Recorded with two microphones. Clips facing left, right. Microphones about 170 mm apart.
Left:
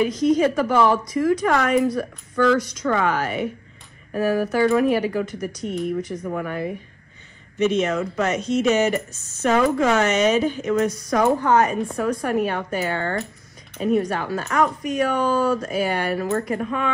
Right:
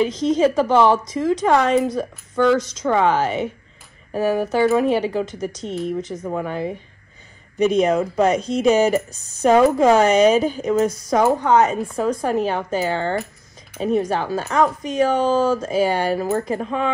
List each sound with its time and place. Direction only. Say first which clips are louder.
0.0 s speech: right 1 dB; 25° right (ahead or behind)
7.5 s a woman's voice: right 4 dB; 35° right (ahead or behind)
11.3 s speech: right 2 dB; 20° right (ahead or behind)